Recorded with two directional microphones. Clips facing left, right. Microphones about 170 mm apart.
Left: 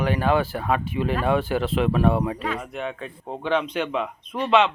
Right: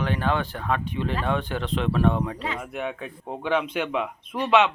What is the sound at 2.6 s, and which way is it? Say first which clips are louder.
A man's voice: even; 10° right (ahead or behind).